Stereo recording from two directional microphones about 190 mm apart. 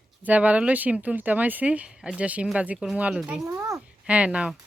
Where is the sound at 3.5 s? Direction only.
15° right (ahead or behind).